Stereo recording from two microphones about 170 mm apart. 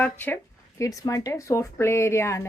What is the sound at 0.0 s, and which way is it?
Speech, 10° left (ahead or behind).